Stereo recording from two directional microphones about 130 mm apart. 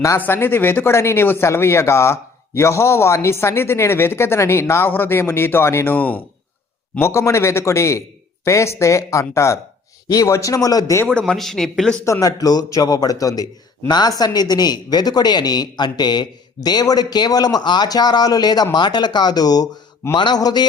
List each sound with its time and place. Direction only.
0.2 s speech: 15° left (ahead or behind)
11.0 s speech: 10° left (ahead or behind)
12.0 s a man's voice: 25° left (ahead or behind)